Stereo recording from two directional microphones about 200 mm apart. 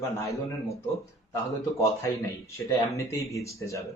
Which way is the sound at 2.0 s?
15° left (ahead or behind).